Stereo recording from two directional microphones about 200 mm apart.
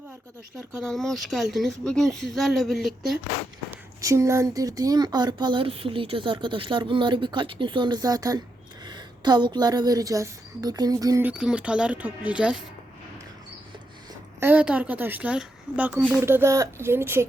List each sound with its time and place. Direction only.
0.8 s speech: centre (ahead or behind)
3.7 s a woman's voice: 15° right (ahead or behind)
14.1 s a woman's voice: 10° right (ahead or behind)